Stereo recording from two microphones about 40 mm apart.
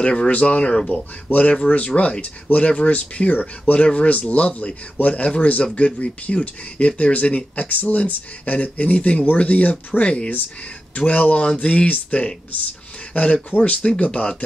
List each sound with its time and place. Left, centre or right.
0.0 s speech: left
1.5 s speech: left
1.8 s speech: left
5.9 s speech: left
6.3 s speech: left